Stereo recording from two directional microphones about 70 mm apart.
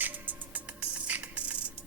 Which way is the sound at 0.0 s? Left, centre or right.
Right.